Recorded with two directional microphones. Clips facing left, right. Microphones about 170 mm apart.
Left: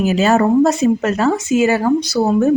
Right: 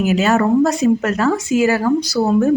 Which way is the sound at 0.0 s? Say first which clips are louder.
Left 1 dB; 30° left (ahead or behind).